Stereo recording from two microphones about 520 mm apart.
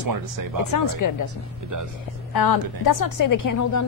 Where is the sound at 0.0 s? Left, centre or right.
Right.